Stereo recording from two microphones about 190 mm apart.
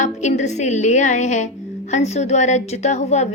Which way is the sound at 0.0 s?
40° left (ahead or behind).